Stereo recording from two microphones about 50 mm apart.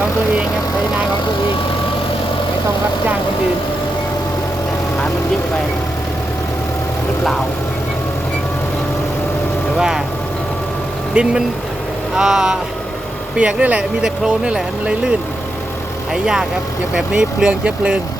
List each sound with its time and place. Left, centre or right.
9.7 s speech: centre
11.1 s speech: right
12.1 s speech: centre
13.6 s speech: right
14.0 s speech: centre
16.1 s speech: centre
16.9 s speech: right